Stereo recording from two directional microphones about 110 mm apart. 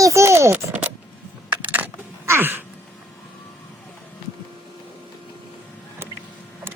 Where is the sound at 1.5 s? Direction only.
15° right (ahead or behind).